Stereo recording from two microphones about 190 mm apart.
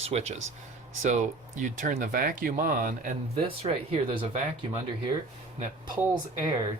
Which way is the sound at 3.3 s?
30° right (ahead or behind).